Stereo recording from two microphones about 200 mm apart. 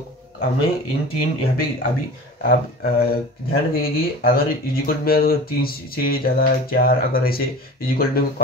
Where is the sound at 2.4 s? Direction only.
50° left (ahead or behind).